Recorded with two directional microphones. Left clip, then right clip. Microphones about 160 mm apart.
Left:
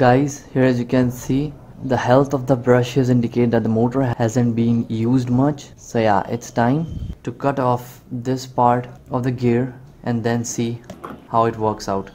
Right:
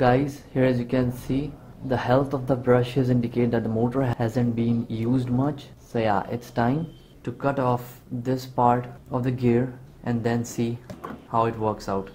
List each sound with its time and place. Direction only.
0.0 s speech: 20° left (ahead or behind)